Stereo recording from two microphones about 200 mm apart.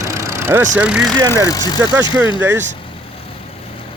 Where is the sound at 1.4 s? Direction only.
20° left (ahead or behind).